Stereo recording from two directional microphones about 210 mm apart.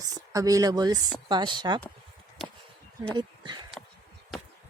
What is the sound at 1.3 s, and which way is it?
Speech, 20° right (ahead or behind).